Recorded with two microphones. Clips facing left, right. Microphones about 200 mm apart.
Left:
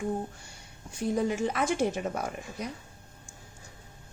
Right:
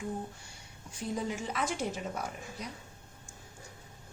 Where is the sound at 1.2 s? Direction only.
60° left (ahead or behind).